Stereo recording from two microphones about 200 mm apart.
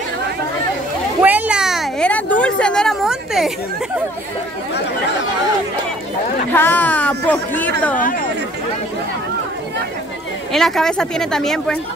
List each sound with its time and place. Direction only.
1.2 s a sound: 10° right (ahead or behind)
6.5 s speech: 10° left (ahead or behind)
8.0 s speech: 45° left (ahead or behind)
10.5 s speech: centre (ahead or behind)